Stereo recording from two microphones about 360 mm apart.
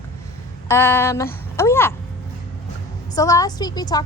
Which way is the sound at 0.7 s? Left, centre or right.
Centre.